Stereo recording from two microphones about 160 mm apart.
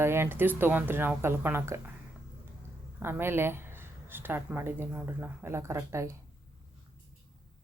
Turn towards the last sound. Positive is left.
turn(degrees=-20)  # may be behind; listen again after turning